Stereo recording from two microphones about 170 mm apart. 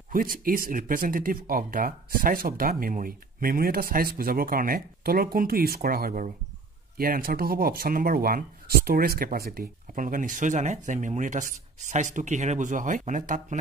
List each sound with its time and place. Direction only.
0.1 s speech: 55° right (ahead or behind)